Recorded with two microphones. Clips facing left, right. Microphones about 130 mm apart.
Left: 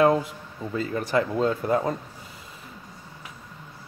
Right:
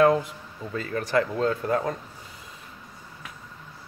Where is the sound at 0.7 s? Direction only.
15° left (ahead or behind).